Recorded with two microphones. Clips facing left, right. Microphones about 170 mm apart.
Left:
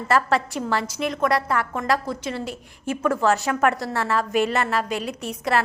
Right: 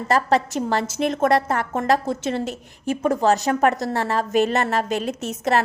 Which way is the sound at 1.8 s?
25° right (ahead or behind).